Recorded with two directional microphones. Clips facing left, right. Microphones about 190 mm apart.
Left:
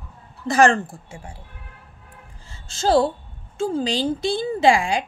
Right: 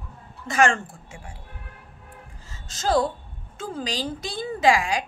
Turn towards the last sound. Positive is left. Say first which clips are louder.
# left 3 dB
turn(degrees=25)  # may be behind; listen again after turning